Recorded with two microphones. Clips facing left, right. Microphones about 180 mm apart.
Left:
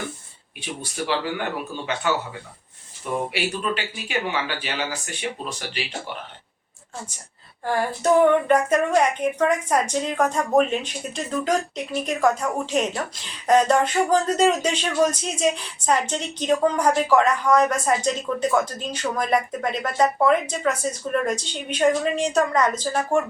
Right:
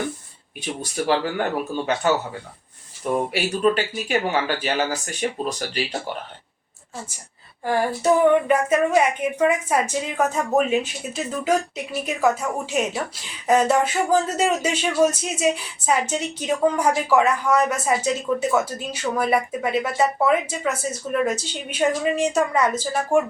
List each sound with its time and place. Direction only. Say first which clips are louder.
0.6 s speech: right 4 dB; 45° right (ahead or behind)
3.3 s speech: right 6 dB; 45° right (ahead or behind)
7.6 s speech: right 2 dB; 10° right (ahead or behind)